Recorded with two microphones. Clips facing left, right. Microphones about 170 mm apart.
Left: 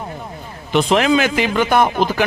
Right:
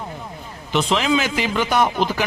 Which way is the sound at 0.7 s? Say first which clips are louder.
Left 5 dB; 55° left (ahead or behind).